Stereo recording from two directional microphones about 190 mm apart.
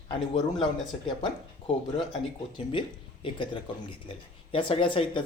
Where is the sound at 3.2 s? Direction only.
25° left (ahead or behind).